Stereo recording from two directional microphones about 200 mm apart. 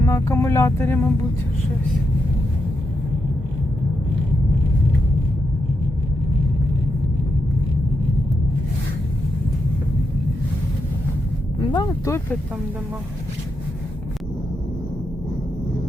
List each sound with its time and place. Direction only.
0.0 s speech: 15° left (ahead or behind)
11.6 s speech: 20° left (ahead or behind)